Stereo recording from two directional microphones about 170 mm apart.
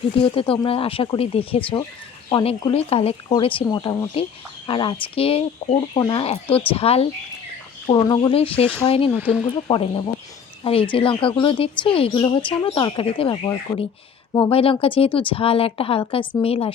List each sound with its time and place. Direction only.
0.2 s speech: 30° left (ahead or behind)
9.1 s speech: 10° right (ahead or behind)
9.6 s speech: 30° left (ahead or behind)